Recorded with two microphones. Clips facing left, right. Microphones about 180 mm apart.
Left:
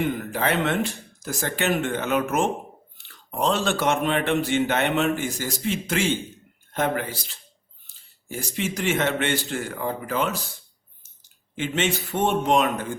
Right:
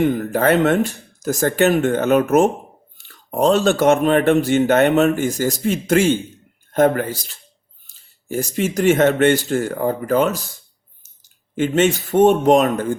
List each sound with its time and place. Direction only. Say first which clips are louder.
0.0 s a man's voice: right 8 dB; 40° right (ahead or behind)
11.5 s a man's voice: right 9 dB; 45° right (ahead or behind)